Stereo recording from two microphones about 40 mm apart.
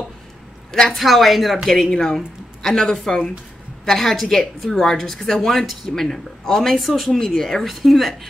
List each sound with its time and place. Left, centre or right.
0.8 s speech: centre
1.9 s speech: centre